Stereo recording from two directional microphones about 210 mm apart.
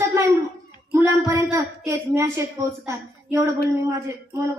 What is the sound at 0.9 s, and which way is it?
A woman's voice, 10° right (ahead or behind).